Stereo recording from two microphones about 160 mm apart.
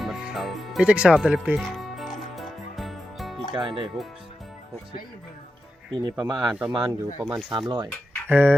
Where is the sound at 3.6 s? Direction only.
30° right (ahead or behind).